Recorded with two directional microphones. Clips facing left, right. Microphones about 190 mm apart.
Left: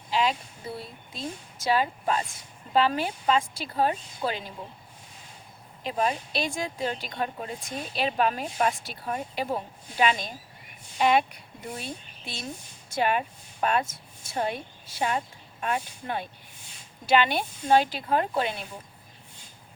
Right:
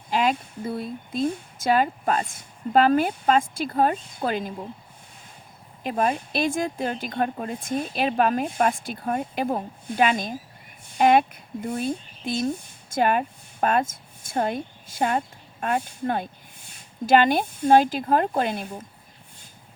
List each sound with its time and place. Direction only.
0.1 s a sound: 50° right (ahead or behind)
0.8 s speech: 50° right (ahead or behind)
5.8 s a woman's voice: 50° right (ahead or behind)